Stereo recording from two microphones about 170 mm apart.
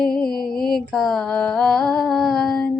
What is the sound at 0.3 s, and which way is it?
Mantra, 60° left (ahead or behind).